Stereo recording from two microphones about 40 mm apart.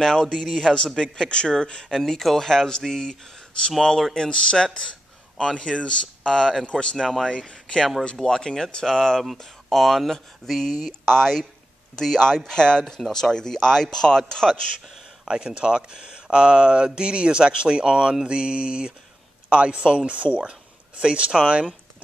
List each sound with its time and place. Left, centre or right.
0.0 s speech: centre
2.0 s speech: centre; by 7.0 s left
7.0 s speech: centre
7.2 s speech: left
15.2 s speech: right